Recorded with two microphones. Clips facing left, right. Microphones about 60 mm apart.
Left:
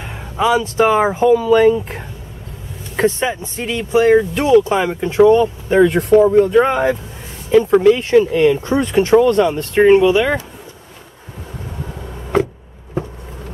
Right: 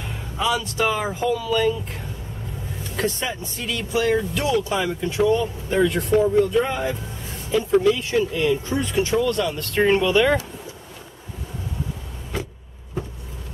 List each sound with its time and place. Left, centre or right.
0.0 s speech: left
9.6 s speech: left
12.3 s vehicle: left